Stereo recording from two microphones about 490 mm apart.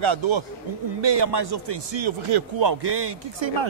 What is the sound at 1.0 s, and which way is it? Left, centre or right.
A man's voice, right.